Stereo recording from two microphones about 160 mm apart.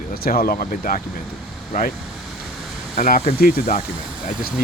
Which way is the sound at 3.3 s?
70° left (ahead or behind).